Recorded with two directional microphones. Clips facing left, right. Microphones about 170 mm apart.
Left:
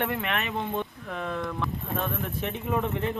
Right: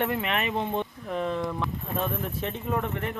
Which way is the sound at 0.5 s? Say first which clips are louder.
Right 2 dB; 20° right (ahead or behind).